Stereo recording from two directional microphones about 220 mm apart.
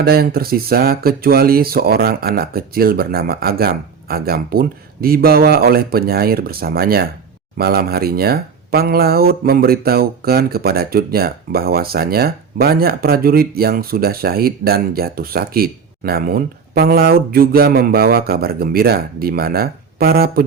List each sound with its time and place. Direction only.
0.0 s speech: 45° right (ahead or behind)